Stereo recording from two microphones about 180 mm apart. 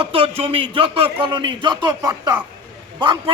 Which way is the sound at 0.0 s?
30° right (ahead or behind).